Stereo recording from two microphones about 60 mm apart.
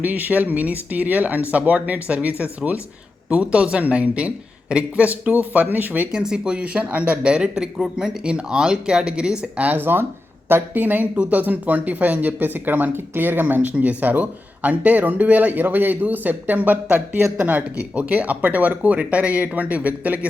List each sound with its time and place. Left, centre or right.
0.0 s speech: right
6.1 s speech: centre
9.6 s speech: right